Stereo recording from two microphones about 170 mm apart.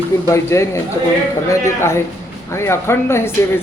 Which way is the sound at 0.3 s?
15° left (ahead or behind).